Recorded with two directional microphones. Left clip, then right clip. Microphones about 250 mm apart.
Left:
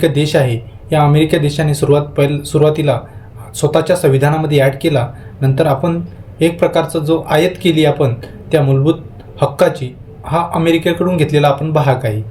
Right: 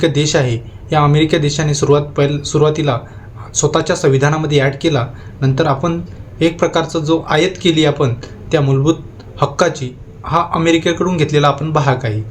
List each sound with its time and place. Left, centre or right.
0.0 s speech: centre